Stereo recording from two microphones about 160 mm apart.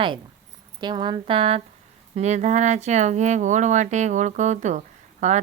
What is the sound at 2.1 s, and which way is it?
Speech, 45° right (ahead or behind).